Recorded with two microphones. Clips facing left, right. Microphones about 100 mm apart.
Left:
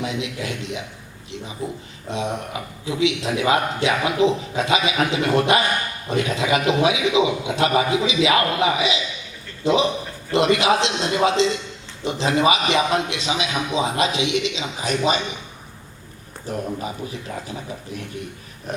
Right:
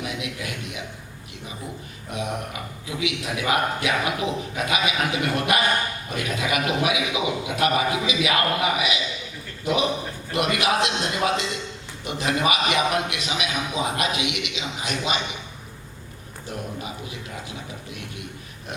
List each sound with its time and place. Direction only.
0.0 s a man's voice: 25° left (ahead or behind)